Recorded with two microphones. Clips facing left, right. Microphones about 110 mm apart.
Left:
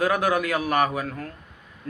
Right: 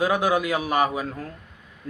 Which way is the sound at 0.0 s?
20° right (ahead or behind).